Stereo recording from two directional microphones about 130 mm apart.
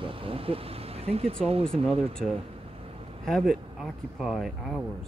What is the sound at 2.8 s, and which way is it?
Vehicle, 50° right (ahead or behind).